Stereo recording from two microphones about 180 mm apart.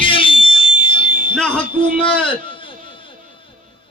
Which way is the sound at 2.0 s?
30° left (ahead or behind).